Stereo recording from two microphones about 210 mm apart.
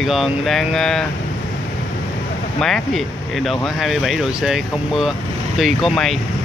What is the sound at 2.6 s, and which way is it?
Speech, centre (ahead or behind).